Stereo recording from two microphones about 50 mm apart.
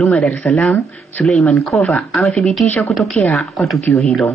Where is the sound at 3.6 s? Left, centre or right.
Centre.